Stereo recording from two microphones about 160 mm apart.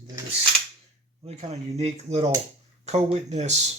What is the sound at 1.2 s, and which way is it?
Speech, 40° right (ahead or behind).